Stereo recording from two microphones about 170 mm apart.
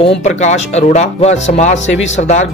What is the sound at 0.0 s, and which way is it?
Speech, 35° left (ahead or behind).